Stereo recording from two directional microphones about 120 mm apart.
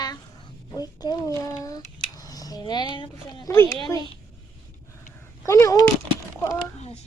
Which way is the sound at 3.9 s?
30° left (ahead or behind).